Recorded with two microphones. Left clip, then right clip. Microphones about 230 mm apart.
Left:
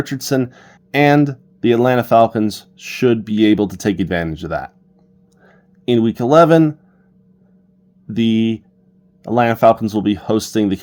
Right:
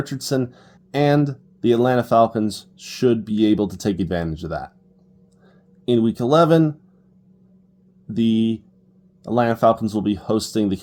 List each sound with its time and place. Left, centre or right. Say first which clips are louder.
0.0 s speech: left 4 dB; left
5.8 s speech: left 3 dB; left
8.1 s speech: left 3 dB; left